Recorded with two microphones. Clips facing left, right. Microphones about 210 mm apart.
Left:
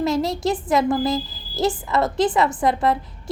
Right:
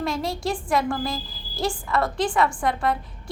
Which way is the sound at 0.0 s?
20° left (ahead or behind).